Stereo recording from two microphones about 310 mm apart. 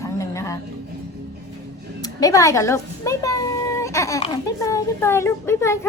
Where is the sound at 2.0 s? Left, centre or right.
Centre.